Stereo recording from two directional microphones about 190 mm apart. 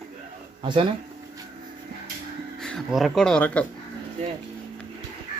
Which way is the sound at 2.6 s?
Centre (ahead or behind).